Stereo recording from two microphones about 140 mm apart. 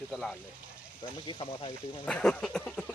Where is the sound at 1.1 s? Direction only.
35° left (ahead or behind).